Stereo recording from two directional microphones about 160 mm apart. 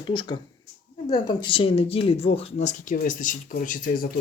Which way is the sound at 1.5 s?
35° left (ahead or behind).